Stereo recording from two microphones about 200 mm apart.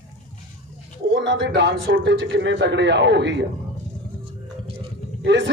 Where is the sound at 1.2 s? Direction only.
55° right (ahead or behind).